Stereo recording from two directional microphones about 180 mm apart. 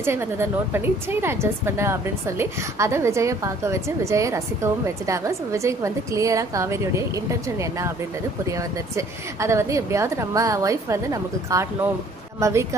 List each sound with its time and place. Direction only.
0.0 s speech: 15° right (ahead or behind)